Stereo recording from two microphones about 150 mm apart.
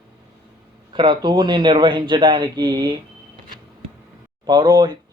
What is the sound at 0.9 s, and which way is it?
Speech, 30° right (ahead or behind).